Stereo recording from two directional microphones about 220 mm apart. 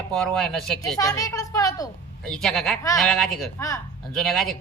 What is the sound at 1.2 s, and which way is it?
Speech, 15° left (ahead or behind).